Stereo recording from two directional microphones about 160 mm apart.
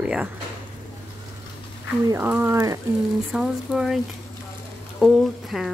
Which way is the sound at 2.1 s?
10° right (ahead or behind).